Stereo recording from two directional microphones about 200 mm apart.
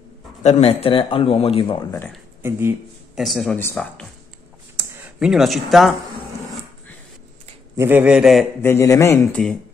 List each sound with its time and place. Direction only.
0.4 s speech: 35° left (ahead or behind)
3.2 s speech: centre (ahead or behind)
4.7 s speech: 5° right (ahead or behind)
7.7 s speech: 10° right (ahead or behind)
8.6 s speech: 15° left (ahead or behind)